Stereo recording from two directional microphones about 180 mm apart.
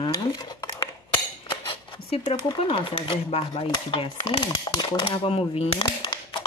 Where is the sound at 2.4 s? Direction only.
30° left (ahead or behind).